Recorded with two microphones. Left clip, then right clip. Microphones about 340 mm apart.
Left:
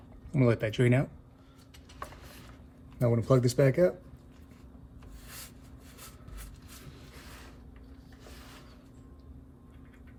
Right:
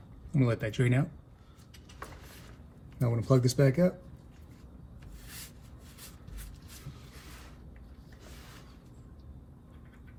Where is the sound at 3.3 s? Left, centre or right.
Left.